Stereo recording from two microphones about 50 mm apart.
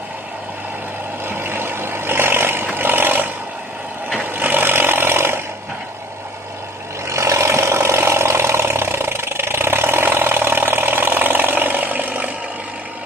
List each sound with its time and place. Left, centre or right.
1.2 s vehicle: right
4.4 s a sound: right
7.1 s vehicle: right